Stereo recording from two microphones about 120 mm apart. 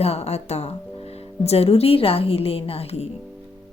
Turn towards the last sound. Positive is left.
turn(degrees=60)  # may be behind; listen again after turning